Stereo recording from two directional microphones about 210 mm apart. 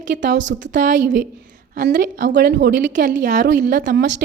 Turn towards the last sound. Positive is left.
turn(degrees=-40)  # may be behind; listen again after turning